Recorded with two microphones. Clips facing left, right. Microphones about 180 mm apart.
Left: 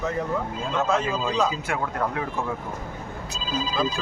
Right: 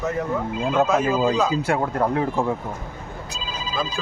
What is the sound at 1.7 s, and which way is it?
Speech, 35° right (ahead or behind).